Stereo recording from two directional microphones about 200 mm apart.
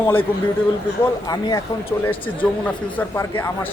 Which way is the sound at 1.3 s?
15° left (ahead or behind).